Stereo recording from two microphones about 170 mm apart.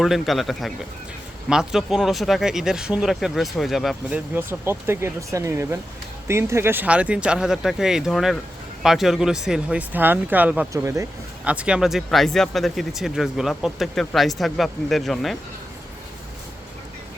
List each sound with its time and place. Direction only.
0.0 s speech: centre (ahead or behind)
4.4 s speech: 15° right (ahead or behind)
11.4 s speech: 5° right (ahead or behind)